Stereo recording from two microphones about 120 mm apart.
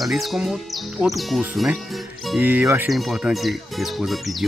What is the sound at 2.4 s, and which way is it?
Speech, 15° right (ahead or behind).